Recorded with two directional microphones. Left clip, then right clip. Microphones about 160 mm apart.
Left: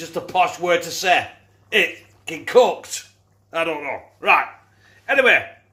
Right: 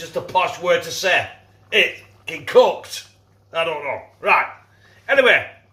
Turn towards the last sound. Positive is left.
turn(degrees=40)  # may be behind; listen again after turning